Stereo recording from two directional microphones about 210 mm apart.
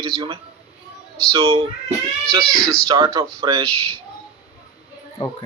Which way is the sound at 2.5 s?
5° left (ahead or behind).